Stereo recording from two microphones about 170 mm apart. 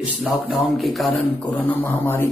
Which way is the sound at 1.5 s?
10° left (ahead or behind).